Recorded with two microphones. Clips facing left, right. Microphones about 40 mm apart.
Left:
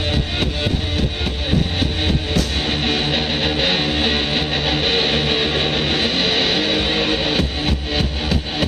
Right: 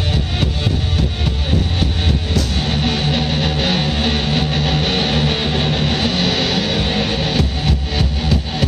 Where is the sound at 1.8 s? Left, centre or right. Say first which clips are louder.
Even; centre.